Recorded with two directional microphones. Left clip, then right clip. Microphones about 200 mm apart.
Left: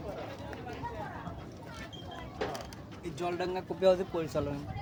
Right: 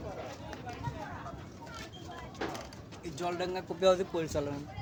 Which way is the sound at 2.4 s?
55° left (ahead or behind).